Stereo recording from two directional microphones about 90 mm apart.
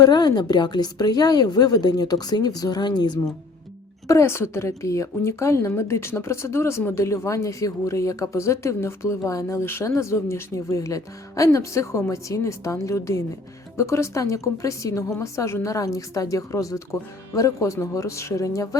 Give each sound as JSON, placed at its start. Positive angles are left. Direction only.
{"t": 0.0, "sound": "speech", "side_deg": 50}
{"t": 4.1, "sound": "a woman's voice", "side_deg": 30}